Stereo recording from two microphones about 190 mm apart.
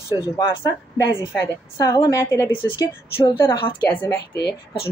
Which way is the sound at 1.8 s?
20° left (ahead or behind).